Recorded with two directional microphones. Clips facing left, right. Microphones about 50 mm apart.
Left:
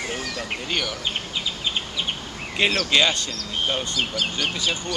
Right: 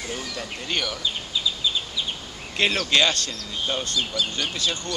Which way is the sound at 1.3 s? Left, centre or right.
Left.